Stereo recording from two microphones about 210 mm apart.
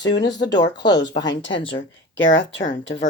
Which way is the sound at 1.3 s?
60° left (ahead or behind).